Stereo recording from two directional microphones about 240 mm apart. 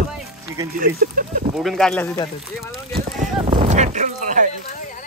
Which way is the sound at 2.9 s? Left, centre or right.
Right.